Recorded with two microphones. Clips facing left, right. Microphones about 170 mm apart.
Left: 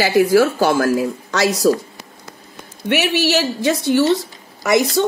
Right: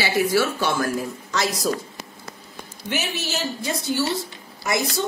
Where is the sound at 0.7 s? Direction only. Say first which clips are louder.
Left 8 dB; 75° left (ahead or behind).